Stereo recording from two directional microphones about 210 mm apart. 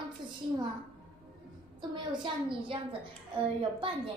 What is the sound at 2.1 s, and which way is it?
A woman's voice, 25° right (ahead or behind).